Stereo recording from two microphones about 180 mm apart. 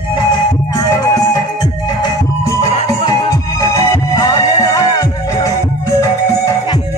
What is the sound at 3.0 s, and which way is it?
Music, 20° left (ahead or behind).